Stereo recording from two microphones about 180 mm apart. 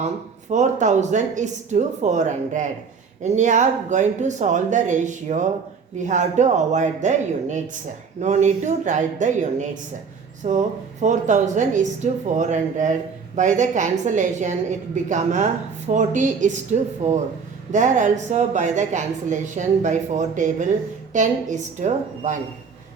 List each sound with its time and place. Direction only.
0.5 s a woman's voice: 40° right (ahead or behind)